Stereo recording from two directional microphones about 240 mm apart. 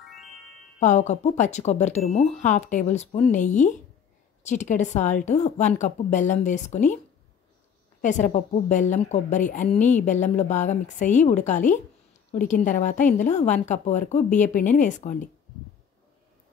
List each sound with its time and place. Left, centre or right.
0.0 s music: centre
0.7 s a woman's voice: left
8.0 s a woman's voice: left